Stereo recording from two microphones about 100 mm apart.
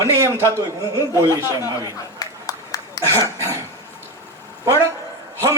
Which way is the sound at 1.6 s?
35° left (ahead or behind).